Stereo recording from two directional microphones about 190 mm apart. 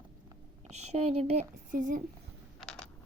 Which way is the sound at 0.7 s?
35° right (ahead or behind).